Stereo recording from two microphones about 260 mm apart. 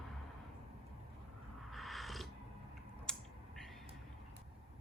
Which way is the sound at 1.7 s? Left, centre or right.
Centre.